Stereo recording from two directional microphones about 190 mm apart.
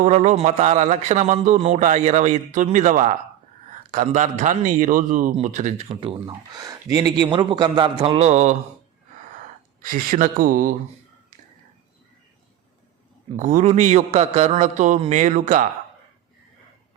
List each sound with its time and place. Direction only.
0.0 s speech: 40° right (ahead or behind)
9.8 s speech: 45° right (ahead or behind)
13.3 s speech: 40° right (ahead or behind)